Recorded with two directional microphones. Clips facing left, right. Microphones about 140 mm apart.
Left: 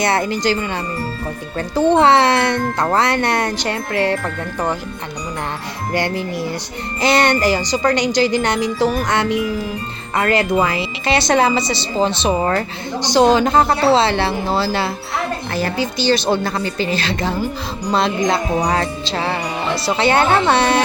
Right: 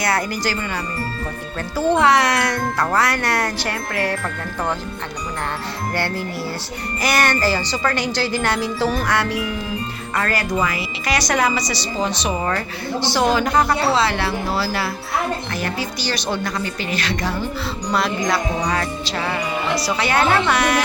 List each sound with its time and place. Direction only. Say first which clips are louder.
0.0 s music: left 4 dB; 25° left (ahead or behind)
5.9 s speech: left 5 dB; 15° left (ahead or behind)
7.0 s music: left 4 dB; 25° left (ahead or behind)
13.0 s music: left 6 dB; 20° left (ahead or behind)